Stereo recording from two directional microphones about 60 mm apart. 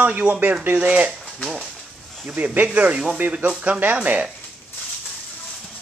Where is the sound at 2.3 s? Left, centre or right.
Right.